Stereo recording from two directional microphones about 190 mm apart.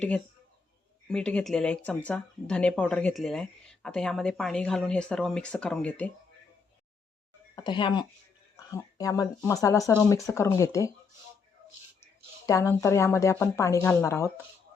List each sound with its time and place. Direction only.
1.0 s speech: 5° left (ahead or behind)
7.5 s speech: 25° left (ahead or behind)
12.5 s speech: 15° left (ahead or behind)